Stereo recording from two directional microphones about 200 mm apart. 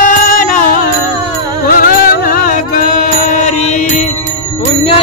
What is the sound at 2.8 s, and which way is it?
Mantra, 40° left (ahead or behind).